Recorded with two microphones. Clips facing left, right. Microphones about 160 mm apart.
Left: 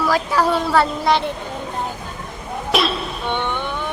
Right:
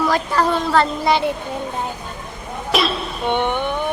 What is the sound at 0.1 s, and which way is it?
Speech, 5° left (ahead or behind).